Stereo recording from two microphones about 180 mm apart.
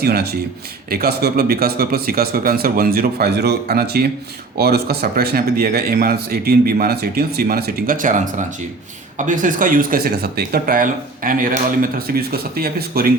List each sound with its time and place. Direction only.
0.0 s a man's voice: 60° right (ahead or behind)